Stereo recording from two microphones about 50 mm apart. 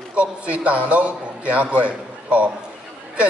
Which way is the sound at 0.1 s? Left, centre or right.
Right.